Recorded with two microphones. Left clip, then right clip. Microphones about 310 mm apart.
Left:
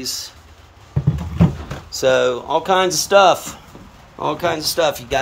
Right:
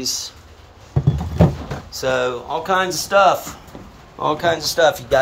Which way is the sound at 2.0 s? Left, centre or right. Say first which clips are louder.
Left 4 dB; centre.